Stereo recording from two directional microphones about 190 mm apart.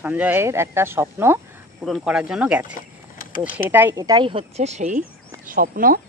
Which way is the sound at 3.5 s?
10° right (ahead or behind).